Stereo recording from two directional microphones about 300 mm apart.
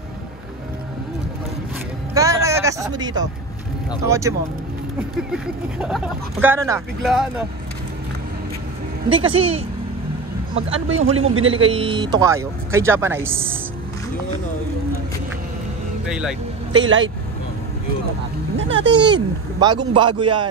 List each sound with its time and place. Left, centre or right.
2.1 s a sound: centre
4.0 s speech: centre
9.1 s speech: centre
10.5 s a man's voice: right
11.7 s speech: centre
16.1 s speech: centre
16.7 s speech: right
18.6 s speech: right
18.9 s speech: centre